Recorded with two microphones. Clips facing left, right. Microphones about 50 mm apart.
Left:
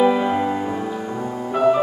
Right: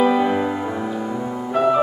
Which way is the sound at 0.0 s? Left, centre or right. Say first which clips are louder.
Even; centre.